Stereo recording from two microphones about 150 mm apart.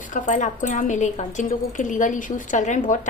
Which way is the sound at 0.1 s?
60° left (ahead or behind).